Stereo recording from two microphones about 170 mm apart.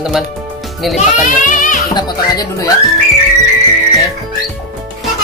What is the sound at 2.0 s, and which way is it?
Speech, 25° left (ahead or behind).